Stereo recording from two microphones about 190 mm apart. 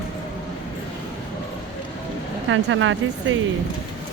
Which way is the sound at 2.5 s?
90° right.